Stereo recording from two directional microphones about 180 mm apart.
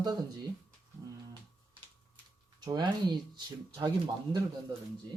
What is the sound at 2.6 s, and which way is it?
Speech, 25° right (ahead or behind).